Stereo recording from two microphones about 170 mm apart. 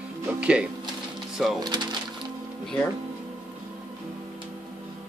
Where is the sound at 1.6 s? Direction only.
25° right (ahead or behind).